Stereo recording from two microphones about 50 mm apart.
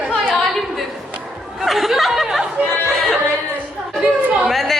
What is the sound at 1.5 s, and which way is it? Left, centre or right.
Laughter, centre.